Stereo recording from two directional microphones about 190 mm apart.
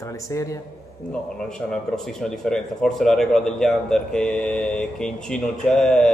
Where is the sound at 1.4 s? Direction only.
5° left (ahead or behind).